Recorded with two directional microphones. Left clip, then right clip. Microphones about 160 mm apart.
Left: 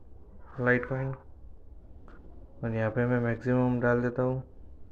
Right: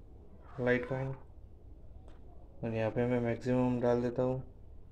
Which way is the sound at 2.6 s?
5° left (ahead or behind).